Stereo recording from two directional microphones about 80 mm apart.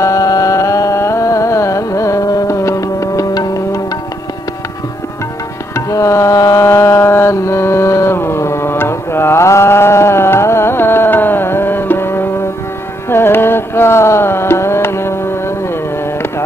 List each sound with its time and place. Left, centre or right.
0.0 s carnatic music: left
5.8 s music: left
13.1 s carnatic music: left